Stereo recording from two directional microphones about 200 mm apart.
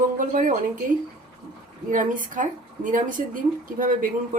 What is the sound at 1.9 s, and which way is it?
Speech, 40° right (ahead or behind).